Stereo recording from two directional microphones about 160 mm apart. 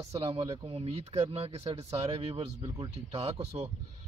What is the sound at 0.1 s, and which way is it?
Speech, 35° right (ahead or behind).